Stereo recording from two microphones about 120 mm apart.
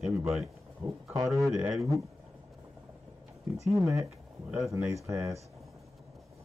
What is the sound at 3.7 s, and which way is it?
Speech, 25° right (ahead or behind).